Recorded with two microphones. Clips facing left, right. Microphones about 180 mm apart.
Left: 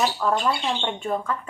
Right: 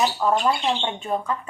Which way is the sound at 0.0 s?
15° right (ahead or behind).